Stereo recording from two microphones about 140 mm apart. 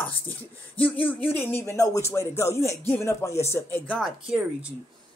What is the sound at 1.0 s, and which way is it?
Speech, 15° left (ahead or behind).